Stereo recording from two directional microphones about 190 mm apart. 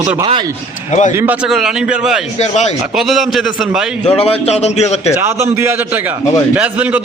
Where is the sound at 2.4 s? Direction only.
35° left (ahead or behind).